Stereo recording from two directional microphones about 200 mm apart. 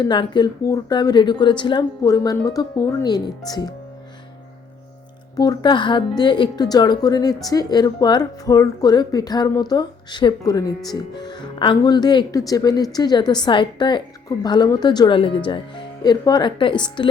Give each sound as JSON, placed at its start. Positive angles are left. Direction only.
{"t": 0.0, "sound": "speech", "side_deg": 20}
{"t": 5.4, "sound": "speech", "side_deg": 20}